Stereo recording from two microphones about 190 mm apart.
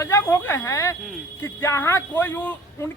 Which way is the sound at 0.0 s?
15° left (ahead or behind).